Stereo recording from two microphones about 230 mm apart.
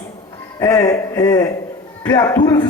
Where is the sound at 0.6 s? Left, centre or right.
Centre.